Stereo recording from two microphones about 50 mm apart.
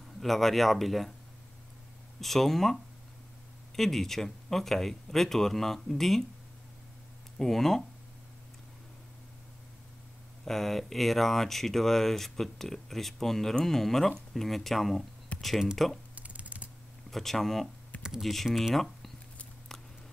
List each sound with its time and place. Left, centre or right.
0.2 s speech: centre
2.1 s speech: centre
7.3 s speech: centre
10.4 s speech: centre
15.3 s computer keyboard: left
15.8 s speech: centre
16.2 s a sound: right
17.1 s speech: centre